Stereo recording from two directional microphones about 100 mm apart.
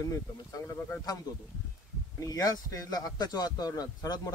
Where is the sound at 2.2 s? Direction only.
35° left (ahead or behind).